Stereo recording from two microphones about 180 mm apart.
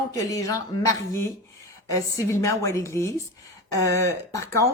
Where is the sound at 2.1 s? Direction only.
15° left (ahead or behind).